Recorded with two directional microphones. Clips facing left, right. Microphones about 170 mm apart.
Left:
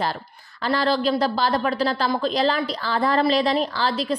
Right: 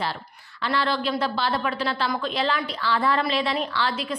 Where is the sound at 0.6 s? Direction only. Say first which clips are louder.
Left 4 dB; 40° left (ahead or behind).